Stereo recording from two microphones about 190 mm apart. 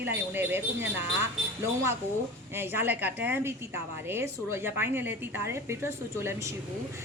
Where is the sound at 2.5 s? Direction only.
10° right (ahead or behind).